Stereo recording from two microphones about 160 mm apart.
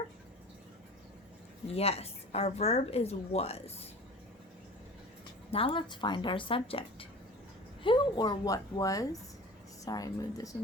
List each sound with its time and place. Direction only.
1.6 s speech: 40° left (ahead or behind)
5.5 s a woman's voice: 35° left (ahead or behind)